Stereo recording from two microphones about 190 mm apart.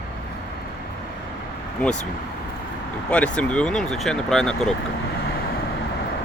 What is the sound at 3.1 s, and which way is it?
Speech, 5° left (ahead or behind).